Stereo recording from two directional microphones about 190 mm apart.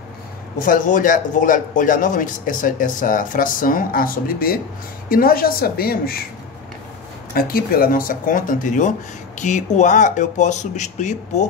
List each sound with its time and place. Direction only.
0.6 s speech: 45° left (ahead or behind)
7.3 s speech: 50° left (ahead or behind)